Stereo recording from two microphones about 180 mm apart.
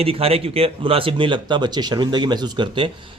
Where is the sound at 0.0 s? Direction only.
30° right (ahead or behind).